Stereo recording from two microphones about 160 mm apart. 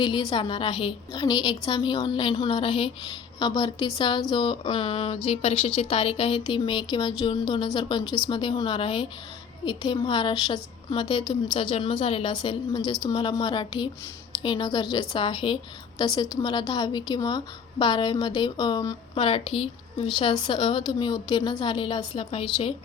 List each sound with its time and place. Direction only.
0.0 s a woman's voice: 30° left (ahead or behind)